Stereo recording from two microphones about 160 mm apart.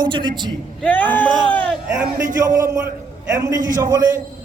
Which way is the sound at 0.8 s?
10° left (ahead or behind).